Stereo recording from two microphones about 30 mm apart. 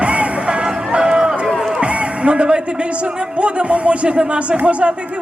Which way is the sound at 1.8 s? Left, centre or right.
Right.